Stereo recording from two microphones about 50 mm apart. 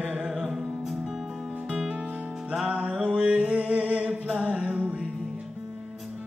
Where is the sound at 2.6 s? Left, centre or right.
Right.